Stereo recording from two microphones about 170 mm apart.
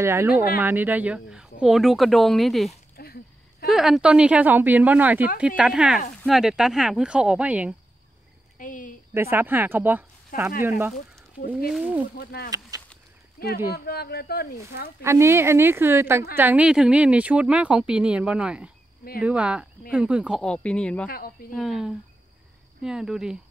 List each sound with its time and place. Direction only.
0.0 s a woman's voice: 15° right (ahead or behind); by 2.7 s centre (ahead or behind)
3.0 s a sound: 65° left (ahead or behind)
3.6 s a woman's voice: centre (ahead or behind)
8.5 s speech: 50° left (ahead or behind)
9.1 s speech: 15° right (ahead or behind)
11.7 s a woman's voice: 5° right (ahead or behind)
12.2 s speech: 70° left (ahead or behind)
12.4 s speech: 20° right (ahead or behind)
13.4 s speech: 60° left (ahead or behind)
15.0 s a woman's voice: 15° right (ahead or behind); by 21.1 s 5° left (ahead or behind)
21.1 s speech: 60° left (ahead or behind)
21.5 s speech: centre (ahead or behind)